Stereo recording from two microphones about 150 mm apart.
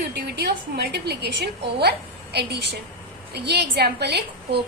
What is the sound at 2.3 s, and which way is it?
A woman's voice, 90° right.